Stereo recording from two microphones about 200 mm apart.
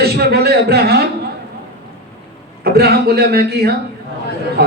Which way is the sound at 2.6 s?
50° right (ahead or behind).